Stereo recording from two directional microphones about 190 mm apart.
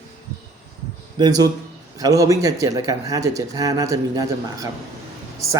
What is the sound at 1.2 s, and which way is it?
A man's voice, 20° right (ahead or behind).